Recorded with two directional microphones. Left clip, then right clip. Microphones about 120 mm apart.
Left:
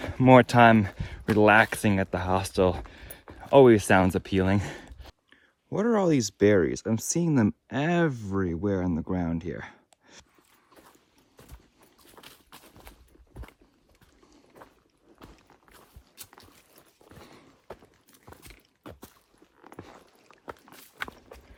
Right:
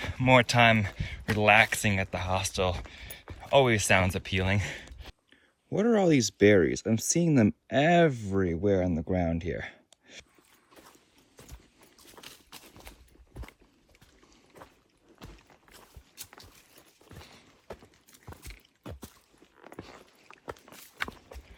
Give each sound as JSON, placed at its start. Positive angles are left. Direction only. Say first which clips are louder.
{"t": 0.4, "sound": "speech", "louder": "left 4 dB", "side_deg": 55}
{"t": 5.7, "sound": "speech", "louder": "even", "side_deg": 20}
{"t": 11.3, "sound": "clip-clop", "louder": "right 1 dB", "side_deg": 5}
{"t": 12.2, "sound": "a sound", "louder": "right 2 dB", "side_deg": 20}
{"t": 17.7, "sound": "clip-clop", "louder": "even", "side_deg": 10}